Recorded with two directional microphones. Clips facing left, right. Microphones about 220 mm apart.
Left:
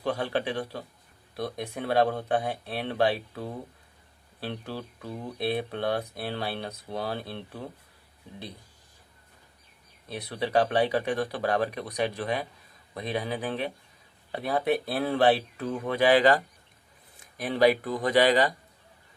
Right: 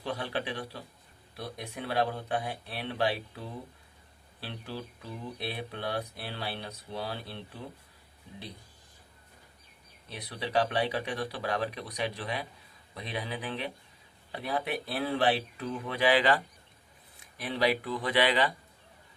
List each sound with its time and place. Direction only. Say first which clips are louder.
0.0 s speech: left 6 dB; 50° left (ahead or behind)
10.1 s speech: left 6 dB; 45° left (ahead or behind)